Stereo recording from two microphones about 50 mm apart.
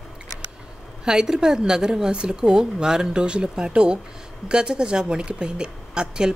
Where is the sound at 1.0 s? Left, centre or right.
Centre.